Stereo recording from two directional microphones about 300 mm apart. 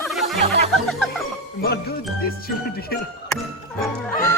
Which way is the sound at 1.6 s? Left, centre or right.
Left.